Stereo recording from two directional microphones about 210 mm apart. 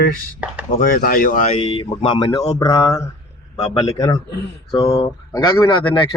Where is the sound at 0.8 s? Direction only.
45° left (ahead or behind).